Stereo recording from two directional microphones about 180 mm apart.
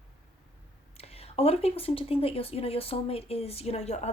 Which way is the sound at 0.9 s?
35° left (ahead or behind).